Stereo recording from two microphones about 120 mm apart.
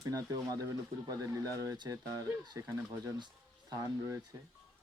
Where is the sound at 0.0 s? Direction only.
30° right (ahead or behind).